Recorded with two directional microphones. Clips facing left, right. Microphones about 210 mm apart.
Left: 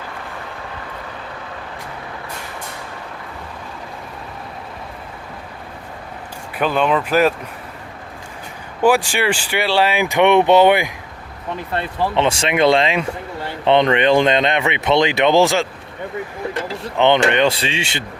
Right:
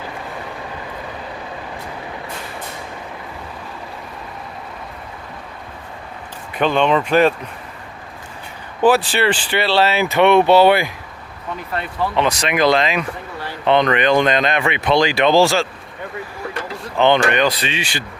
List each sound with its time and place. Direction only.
6.5 s speech: 5° left (ahead or behind)
8.8 s speech: 10° left (ahead or behind)
11.7 s speech: 30° left (ahead or behind)